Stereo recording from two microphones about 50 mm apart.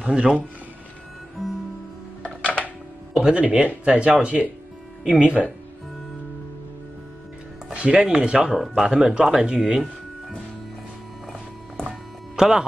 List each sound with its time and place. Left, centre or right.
0.0 s speech: centre
2.2 s music: left
3.1 s speech: centre
7.7 s speech: right
8.5 s speech: centre
12.4 s speech: centre